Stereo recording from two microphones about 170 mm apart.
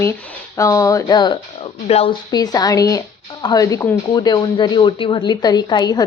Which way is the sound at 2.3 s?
25° left (ahead or behind).